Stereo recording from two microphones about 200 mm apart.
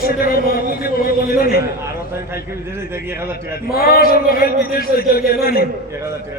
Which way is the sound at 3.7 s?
50° left (ahead or behind).